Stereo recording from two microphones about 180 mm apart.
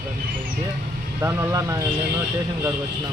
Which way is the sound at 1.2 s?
15° right (ahead or behind).